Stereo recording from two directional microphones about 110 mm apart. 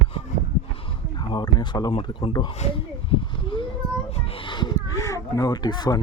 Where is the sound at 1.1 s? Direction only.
40° left (ahead or behind).